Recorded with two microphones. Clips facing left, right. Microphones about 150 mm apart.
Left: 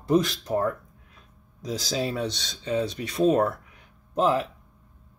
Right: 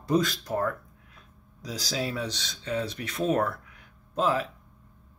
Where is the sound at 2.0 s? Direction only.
25° left (ahead or behind).